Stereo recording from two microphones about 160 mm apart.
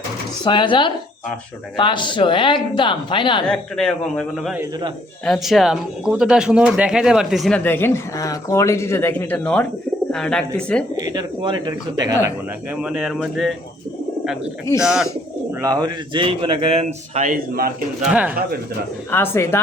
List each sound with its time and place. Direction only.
0.4 s speech: 30° left (ahead or behind)
3.5 s speech: 5° left (ahead or behind)
7.6 s speech: 15° left (ahead or behind)
10.9 s speech: 25° right (ahead or behind)
12.7 s speech: 5° right (ahead or behind)
14.8 s speech: 5° right (ahead or behind)
15.6 s speech: 25° right (ahead or behind); by 17.7 s 65° right (ahead or behind)
18.0 s speech: 10° right (ahead or behind)
19.1 s speech: 15° left (ahead or behind)